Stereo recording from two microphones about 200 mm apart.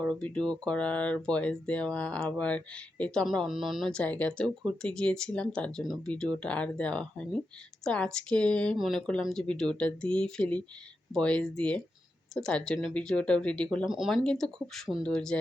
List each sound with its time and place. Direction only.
0.0 s speech: 5° left (ahead or behind)